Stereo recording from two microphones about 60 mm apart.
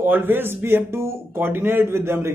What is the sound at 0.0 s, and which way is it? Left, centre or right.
A man's voice, right.